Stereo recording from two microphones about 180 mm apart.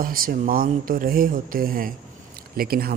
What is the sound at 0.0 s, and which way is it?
Speech, 50° right (ahead or behind).